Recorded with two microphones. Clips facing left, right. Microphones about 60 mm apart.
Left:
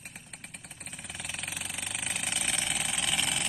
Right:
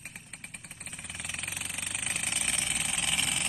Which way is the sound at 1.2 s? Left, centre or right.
Right.